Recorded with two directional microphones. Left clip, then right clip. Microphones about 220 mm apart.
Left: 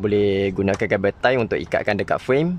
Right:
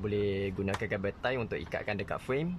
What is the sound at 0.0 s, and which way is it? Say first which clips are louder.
Speech: left 13 dB; 40° left (ahead or behind).